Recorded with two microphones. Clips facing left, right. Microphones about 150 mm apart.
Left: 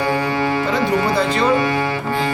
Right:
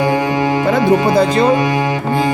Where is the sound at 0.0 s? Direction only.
15° right (ahead or behind).